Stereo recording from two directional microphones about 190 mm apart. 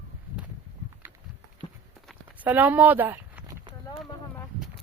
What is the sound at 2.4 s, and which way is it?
Speech, 10° right (ahead or behind).